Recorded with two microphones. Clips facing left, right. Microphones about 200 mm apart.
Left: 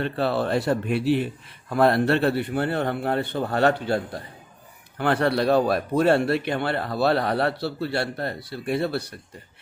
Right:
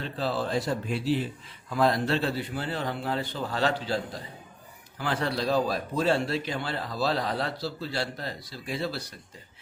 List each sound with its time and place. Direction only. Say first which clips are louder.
0.0 s a man's voice: left 6 dB; 65° left (ahead or behind)